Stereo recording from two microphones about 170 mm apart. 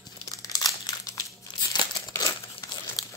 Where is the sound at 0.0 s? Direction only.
20° left (ahead or behind).